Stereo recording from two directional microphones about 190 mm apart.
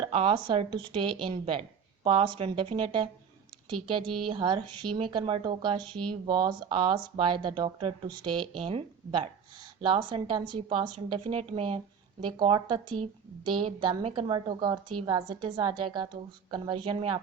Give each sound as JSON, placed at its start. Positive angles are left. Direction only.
{"t": 0.0, "sound": "speech", "side_deg": -30}